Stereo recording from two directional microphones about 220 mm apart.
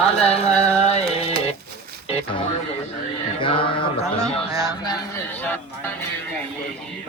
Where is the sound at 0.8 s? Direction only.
30° left (ahead or behind).